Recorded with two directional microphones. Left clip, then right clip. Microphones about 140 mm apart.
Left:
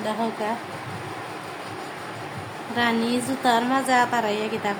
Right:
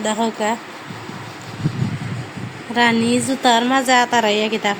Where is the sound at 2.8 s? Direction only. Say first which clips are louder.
Right 7 dB; 25° right (ahead or behind).